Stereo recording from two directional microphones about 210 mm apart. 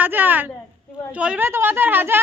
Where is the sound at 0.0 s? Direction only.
10° right (ahead or behind).